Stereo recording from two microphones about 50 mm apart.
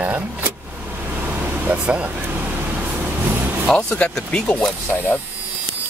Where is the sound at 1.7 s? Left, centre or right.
Right.